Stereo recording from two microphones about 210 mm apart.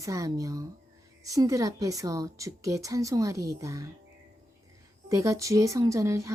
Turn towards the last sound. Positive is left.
turn(degrees=-15)  # may be behind; listen again after turning